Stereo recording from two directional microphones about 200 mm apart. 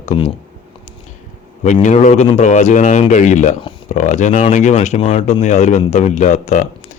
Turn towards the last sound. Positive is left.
turn(degrees=35)  # may be behind; listen again after turning